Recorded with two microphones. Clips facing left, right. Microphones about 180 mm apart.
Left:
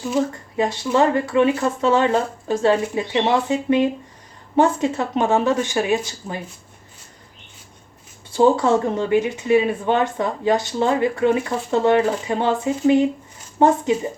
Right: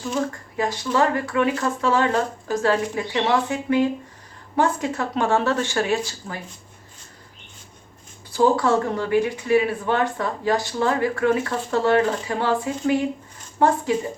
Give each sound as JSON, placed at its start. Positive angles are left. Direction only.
{"t": 0.5, "sound": "speech", "side_deg": 25}
{"t": 8.3, "sound": "speech", "side_deg": 25}